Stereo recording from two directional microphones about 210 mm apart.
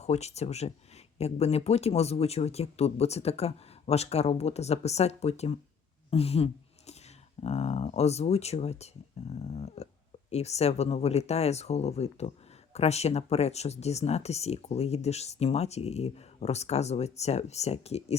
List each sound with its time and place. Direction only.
0.0 s speech: 30° left (ahead or behind)